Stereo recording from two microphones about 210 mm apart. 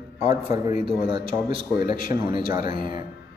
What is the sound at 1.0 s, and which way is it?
A man's voice, 25° right (ahead or behind).